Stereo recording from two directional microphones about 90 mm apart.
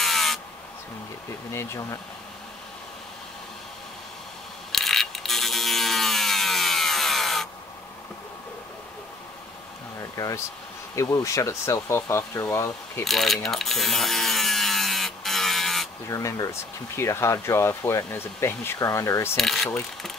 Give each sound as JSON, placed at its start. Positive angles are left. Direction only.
{"t": 0.0, "sound": "a sound", "side_deg": 0}
{"t": 1.5, "sound": "speech", "side_deg": 35}
{"t": 4.7, "sound": "a sound", "side_deg": 5}
{"t": 10.1, "sound": "speech", "side_deg": 40}
{"t": 13.0, "sound": "mechanisms", "side_deg": 0}
{"t": 16.1, "sound": "speech", "side_deg": 35}
{"t": 19.3, "sound": "speech", "side_deg": 5}